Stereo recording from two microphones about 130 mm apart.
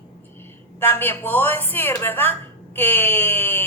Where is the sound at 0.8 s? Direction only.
15° left (ahead or behind).